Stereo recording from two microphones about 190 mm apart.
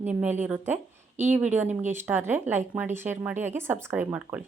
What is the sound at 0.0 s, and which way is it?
A woman's voice, 10° right (ahead or behind).